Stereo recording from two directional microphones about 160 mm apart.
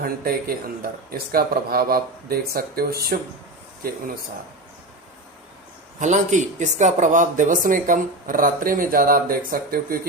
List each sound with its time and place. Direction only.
0.0 s speech: 65° right (ahead or behind)
6.0 s speech: 50° right (ahead or behind); by 10.0 s 65° right (ahead or behind)